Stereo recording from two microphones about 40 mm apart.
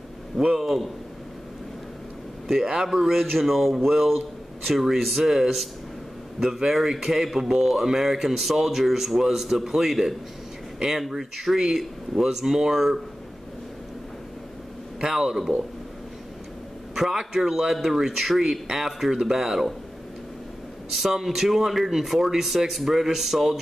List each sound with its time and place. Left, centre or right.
0.4 s speech: centre
2.6 s speech: centre
15.0 s speech: centre
16.9 s speech: centre
20.9 s speech: centre